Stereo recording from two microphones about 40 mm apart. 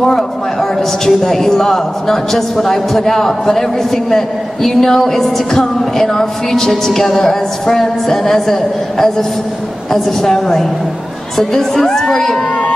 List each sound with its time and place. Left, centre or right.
0.0 s a man's voice: centre